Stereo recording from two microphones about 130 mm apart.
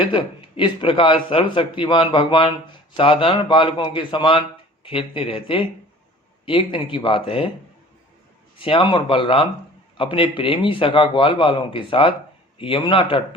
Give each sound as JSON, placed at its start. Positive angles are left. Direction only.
{"t": 0.0, "sound": "a man's voice", "side_deg": 40}
{"t": 8.5, "sound": "a man's voice", "side_deg": 45}